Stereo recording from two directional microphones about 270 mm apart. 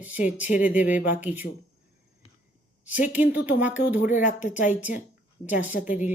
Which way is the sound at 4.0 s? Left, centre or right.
Left.